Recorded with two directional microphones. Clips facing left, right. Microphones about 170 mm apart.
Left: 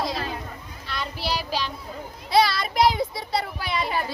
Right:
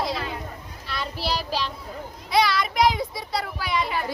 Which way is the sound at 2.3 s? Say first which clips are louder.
Left 1 dB; 30° left (ahead or behind).